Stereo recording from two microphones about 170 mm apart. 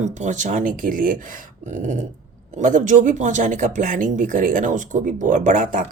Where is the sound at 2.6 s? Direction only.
45° right (ahead or behind).